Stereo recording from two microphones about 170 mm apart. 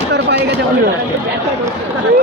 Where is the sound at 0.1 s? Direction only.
85° right.